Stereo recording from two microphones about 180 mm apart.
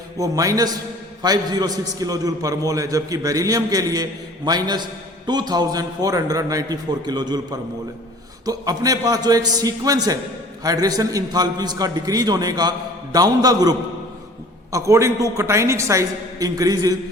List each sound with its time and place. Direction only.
0.2 s a man's voice: 20° right (ahead or behind)